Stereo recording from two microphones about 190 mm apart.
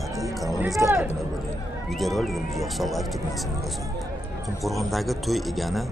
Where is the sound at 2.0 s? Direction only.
Centre (ahead or behind).